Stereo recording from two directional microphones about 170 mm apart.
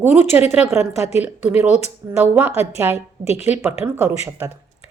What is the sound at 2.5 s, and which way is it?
Speech, 40° left (ahead or behind).